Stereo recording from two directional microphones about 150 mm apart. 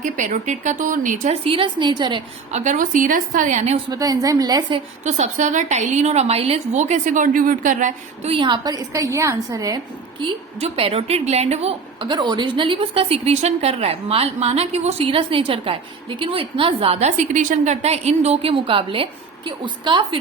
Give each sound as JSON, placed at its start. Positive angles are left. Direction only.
{"t": 0.0, "sound": "speech", "side_deg": -55}
{"t": 1.5, "sound": "a woman's voice", "side_deg": -35}
{"t": 2.5, "sound": "speech", "side_deg": -50}
{"t": 3.8, "sound": "a woman's voice", "side_deg": -25}
{"t": 5.0, "sound": "a woman's voice", "side_deg": -50}
{"t": 8.3, "sound": "a woman's voice", "side_deg": -30}
{"t": 12.0, "sound": "a woman's voice", "side_deg": -30}